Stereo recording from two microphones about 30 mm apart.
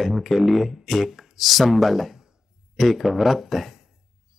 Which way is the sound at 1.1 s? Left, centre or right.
Centre.